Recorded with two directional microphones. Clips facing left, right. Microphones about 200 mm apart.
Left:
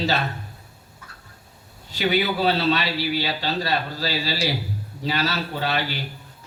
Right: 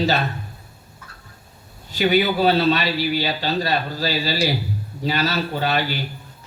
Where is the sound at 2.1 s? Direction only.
45° right (ahead or behind).